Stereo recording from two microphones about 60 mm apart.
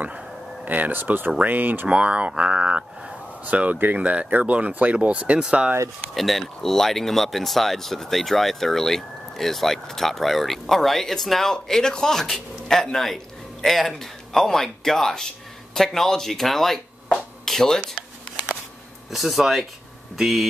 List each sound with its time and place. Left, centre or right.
0.7 s speech: right
2.0 s speech: right
6.1 s a man's voice: centre
19.0 s speech: centre